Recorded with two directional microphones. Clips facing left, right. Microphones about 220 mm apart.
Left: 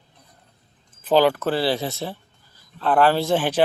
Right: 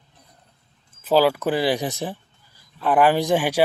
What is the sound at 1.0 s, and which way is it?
Speech, 5° right (ahead or behind).